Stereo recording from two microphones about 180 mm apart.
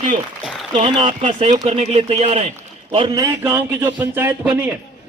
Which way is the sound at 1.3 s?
40° right (ahead or behind).